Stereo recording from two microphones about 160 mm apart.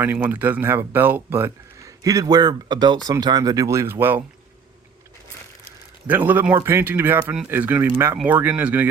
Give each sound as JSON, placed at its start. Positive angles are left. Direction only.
{"t": 0.0, "sound": "speech", "side_deg": -10}
{"t": 6.1, "sound": "speech", "side_deg": -10}